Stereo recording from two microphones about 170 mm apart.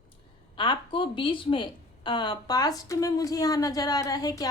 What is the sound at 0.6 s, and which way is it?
A woman's voice, 30° left (ahead or behind).